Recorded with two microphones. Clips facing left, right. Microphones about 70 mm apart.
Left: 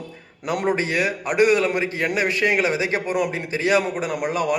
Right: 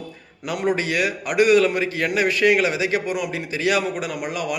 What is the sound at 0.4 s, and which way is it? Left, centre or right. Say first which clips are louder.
A man's voice: even; left.